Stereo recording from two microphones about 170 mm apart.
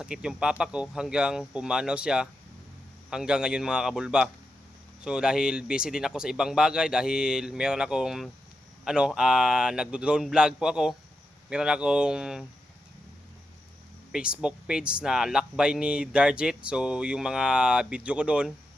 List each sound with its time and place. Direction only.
0.0 s speech: 5° right (ahead or behind)
14.1 s speech: 5° right (ahead or behind)